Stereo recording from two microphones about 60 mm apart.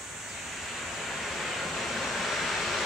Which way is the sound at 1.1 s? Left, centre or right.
Centre.